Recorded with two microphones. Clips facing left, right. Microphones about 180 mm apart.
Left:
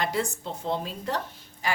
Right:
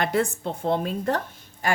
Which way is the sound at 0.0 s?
55° right (ahead or behind).